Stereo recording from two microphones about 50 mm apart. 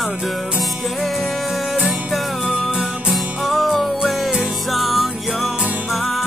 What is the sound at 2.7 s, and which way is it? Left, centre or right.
Music, centre.